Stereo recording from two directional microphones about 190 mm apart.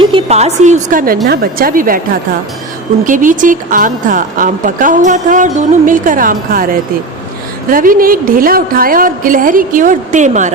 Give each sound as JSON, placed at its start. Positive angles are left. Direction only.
{"t": 0.0, "sound": "a woman's voice", "side_deg": -25}
{"t": 3.0, "sound": "a woman's voice", "side_deg": -45}
{"t": 7.7, "sound": "a woman's voice", "side_deg": -45}